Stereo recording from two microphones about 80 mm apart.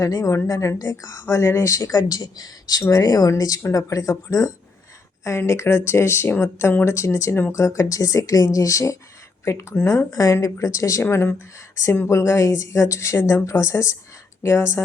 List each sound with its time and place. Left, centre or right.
0.0 s a woman's voice: left
10.1 s a woman's voice: left
11.0 s speech: left